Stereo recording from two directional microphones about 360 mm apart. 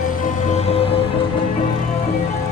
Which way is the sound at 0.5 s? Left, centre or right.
Centre.